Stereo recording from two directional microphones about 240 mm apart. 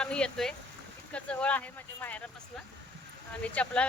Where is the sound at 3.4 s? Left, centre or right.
Centre.